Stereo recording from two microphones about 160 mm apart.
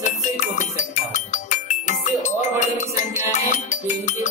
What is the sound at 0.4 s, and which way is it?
Music, 50° left (ahead or behind).